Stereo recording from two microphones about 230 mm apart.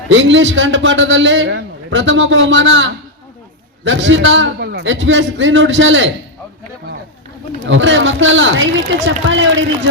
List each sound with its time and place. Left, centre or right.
0.1 s a man's voice: right
7.7 s a man's voice: right